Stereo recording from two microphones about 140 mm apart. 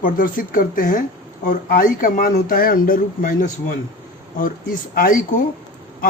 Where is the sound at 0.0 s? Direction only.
75° left (ahead or behind).